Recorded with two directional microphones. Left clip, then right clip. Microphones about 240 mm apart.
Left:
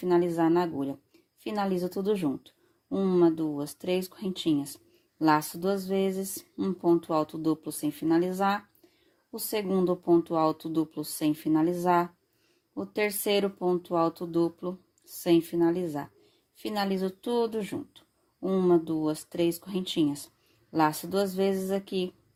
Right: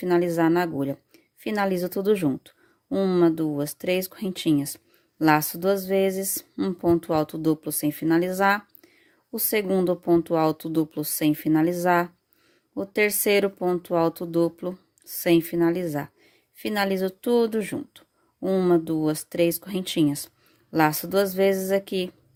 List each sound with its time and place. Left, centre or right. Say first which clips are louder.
0.0 s speech: right 3 dB; right